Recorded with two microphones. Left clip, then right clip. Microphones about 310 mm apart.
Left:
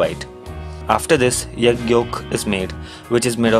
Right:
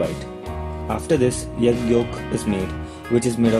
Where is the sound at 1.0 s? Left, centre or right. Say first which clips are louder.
Left 4 dB; left.